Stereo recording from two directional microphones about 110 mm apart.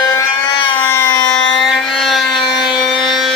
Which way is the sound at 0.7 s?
20° left (ahead or behind).